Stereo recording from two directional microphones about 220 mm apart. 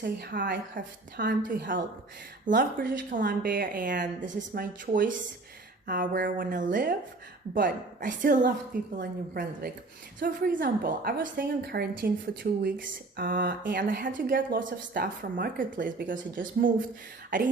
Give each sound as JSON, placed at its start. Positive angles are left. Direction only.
{"t": 0.0, "sound": "a woman's voice", "side_deg": -45}